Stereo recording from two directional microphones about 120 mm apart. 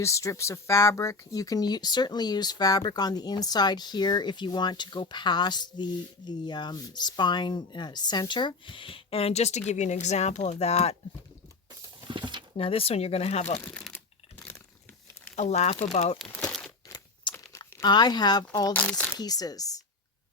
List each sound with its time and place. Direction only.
0.0 s speech: 25° left (ahead or behind); by 10.9 s 60° left (ahead or behind)
12.0 s a sound: 40° right (ahead or behind)
12.5 s speech: 50° left (ahead or behind)
13.6 s speech: 15° left (ahead or behind)
15.4 s speech: 65° left (ahead or behind)
16.5 s crumpling: 5° left (ahead or behind)
17.5 s speech: 30° left (ahead or behind)
18.7 s speech: 10° left (ahead or behind)
19.1 s speech: 30° left (ahead or behind)